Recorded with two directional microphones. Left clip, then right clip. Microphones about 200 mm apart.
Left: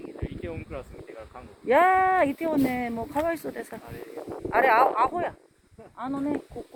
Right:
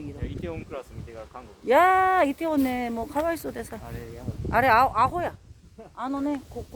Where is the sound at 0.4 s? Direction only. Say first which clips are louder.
Right 3 dB; 30° right (ahead or behind).